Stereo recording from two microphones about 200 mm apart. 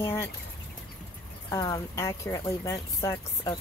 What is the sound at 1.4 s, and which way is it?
Speech, 20° left (ahead or behind).